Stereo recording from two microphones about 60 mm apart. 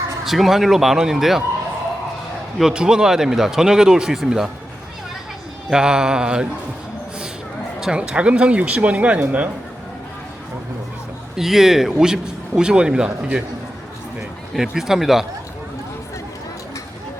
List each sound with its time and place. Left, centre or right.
0.3 s speech: centre
2.6 s a man's voice: centre
5.7 s a man's voice: centre
7.8 s speech: centre
11.3 s a man's voice: centre
14.7 s speech: centre